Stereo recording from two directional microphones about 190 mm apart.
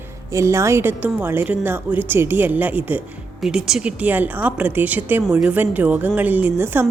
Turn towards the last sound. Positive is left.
turn(degrees=-10)  # may be behind; listen again after turning